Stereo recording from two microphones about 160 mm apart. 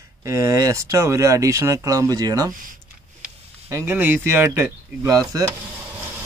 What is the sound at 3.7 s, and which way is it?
Speech, 15° right (ahead or behind).